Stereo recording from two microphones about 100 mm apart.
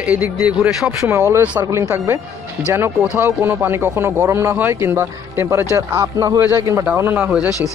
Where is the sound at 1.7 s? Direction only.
25° right (ahead or behind).